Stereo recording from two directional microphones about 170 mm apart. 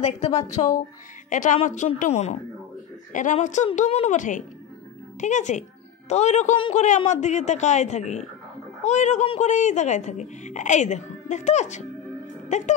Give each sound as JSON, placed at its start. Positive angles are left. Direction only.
{"t": 0.0, "sound": "a woman's voice", "side_deg": 40}